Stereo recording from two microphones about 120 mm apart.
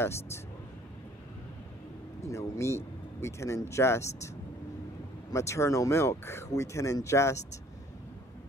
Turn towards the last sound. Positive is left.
turn(degrees=25)  # may be behind; listen again after turning